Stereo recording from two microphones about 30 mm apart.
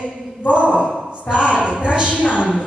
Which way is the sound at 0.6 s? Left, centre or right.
Right.